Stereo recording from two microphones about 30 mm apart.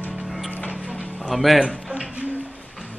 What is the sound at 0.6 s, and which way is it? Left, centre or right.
Music, left.